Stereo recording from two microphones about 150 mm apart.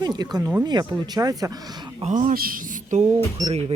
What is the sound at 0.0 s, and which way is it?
Speech, 25° right (ahead or behind).